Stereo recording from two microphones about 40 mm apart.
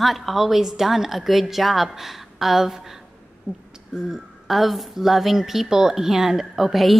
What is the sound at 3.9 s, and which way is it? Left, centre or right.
Speech, centre.